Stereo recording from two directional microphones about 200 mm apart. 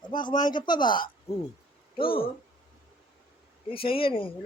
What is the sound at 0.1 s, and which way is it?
A woman's voice, 20° left (ahead or behind).